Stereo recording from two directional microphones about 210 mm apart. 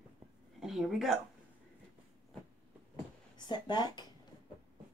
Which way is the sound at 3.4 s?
20° left (ahead or behind).